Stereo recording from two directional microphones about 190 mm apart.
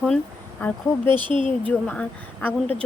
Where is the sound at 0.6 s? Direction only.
10° left (ahead or behind).